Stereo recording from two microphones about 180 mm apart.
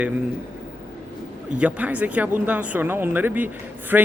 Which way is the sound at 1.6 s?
10° right (ahead or behind).